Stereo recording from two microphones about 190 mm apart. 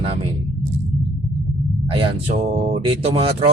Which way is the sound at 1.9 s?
30° right (ahead or behind).